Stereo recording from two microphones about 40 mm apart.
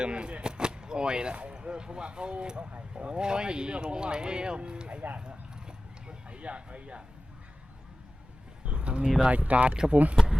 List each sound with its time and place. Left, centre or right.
0.0 s speech: right
5.2 s horse: right
8.6 s a sound: right
9.3 s speech: right